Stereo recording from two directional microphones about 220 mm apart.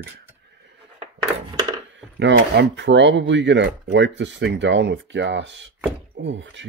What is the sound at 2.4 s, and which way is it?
Speech, 50° right (ahead or behind).